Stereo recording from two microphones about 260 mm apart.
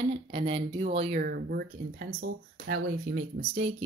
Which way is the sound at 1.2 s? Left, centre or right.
Right.